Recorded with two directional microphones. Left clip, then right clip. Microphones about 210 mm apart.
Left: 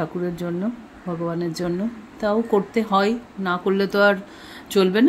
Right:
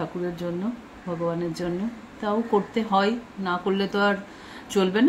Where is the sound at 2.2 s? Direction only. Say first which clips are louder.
Left 4 dB; 35° left (ahead or behind).